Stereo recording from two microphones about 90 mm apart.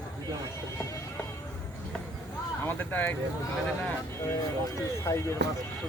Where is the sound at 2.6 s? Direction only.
20° left (ahead or behind).